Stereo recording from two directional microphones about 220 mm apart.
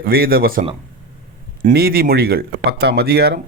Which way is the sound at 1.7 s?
45° right (ahead or behind).